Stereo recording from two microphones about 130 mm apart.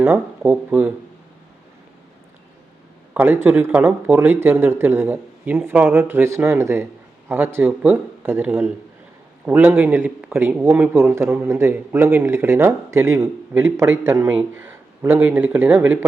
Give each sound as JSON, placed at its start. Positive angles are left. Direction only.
{"t": 0.0, "sound": "a man's voice", "side_deg": -15}
{"t": 3.2, "sound": "a man's voice", "side_deg": -15}